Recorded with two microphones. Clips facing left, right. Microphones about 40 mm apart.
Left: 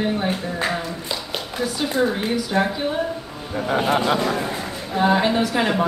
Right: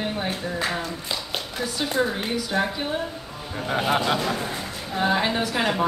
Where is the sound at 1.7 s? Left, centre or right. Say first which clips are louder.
Left 3 dB; centre.